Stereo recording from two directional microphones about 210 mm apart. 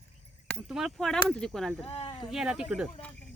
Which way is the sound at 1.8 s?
25° left (ahead or behind).